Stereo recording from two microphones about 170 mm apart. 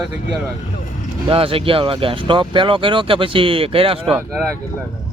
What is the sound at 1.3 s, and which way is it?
Speech, 35° right (ahead or behind).